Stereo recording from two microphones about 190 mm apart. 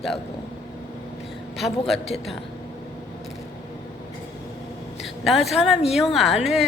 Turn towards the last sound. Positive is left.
turn(degrees=0)  # may be behind; listen again after turning